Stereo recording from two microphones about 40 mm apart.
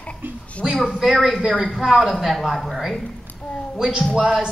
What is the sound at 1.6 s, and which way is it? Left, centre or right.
Speech, centre.